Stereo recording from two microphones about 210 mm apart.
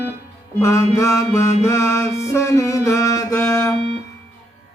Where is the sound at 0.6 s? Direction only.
15° left (ahead or behind).